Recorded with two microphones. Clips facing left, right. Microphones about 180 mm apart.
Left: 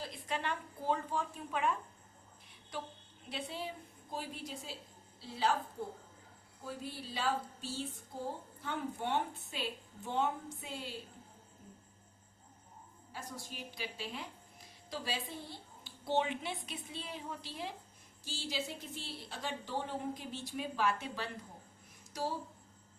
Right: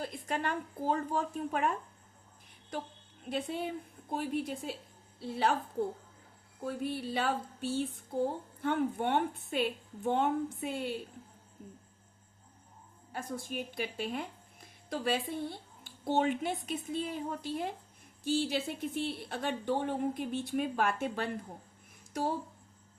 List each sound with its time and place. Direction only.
0.0 s a woman's voice: 50° right (ahead or behind)
3.2 s a woman's voice: 50° right (ahead or behind)
6.7 s a woman's voice: 60° right (ahead or behind)
13.1 s a woman's voice: 50° right (ahead or behind)